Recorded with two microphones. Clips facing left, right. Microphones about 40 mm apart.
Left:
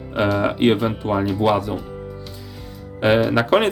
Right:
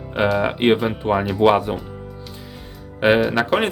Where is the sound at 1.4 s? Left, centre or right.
Right.